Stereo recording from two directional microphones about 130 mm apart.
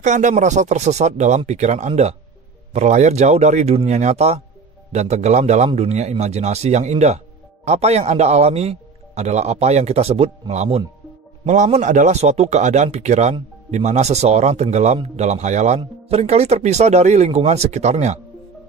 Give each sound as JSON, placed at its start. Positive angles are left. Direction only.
{"t": 0.0, "sound": "speech", "side_deg": -70}
{"t": 10.5, "sound": "speech", "side_deg": -60}